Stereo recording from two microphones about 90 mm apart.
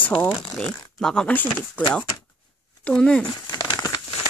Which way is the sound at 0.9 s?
10° left (ahead or behind).